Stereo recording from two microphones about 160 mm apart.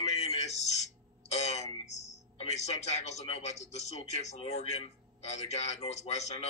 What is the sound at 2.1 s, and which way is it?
Speech, 45° left (ahead or behind).